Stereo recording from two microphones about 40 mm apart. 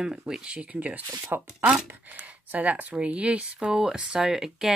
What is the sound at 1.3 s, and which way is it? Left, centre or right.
Speech, right.